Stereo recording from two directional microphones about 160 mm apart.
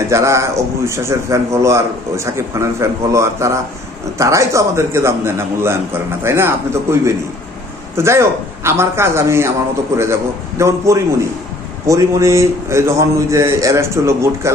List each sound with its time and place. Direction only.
0.1 s a man's voice: 20° right (ahead or behind)